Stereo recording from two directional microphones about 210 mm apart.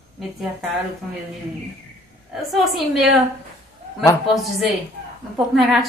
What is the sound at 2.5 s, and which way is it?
Speech, centre (ahead or behind).